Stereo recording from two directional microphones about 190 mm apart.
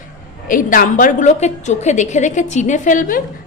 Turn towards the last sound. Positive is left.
turn(degrees=45)  # may be behind; listen again after turning